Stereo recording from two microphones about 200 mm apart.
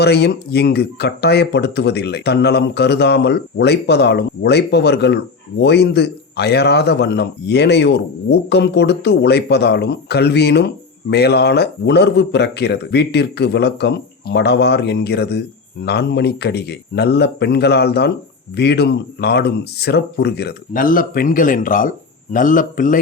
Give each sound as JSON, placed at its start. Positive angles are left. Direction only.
{"t": 0.0, "sound": "speech", "side_deg": 55}